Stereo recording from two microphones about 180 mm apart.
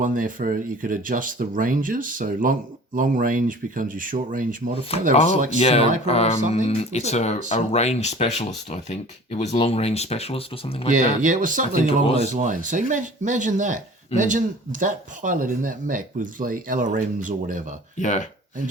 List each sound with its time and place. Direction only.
0.0 s speech: 50° right (ahead or behind)
5.1 s speech: 35° left (ahead or behind)
10.9 s speech: 45° right (ahead or behind)
12.0 s speech: 35° left (ahead or behind)
12.3 s speech: 45° right (ahead or behind)
18.0 s speech: 40° left (ahead or behind)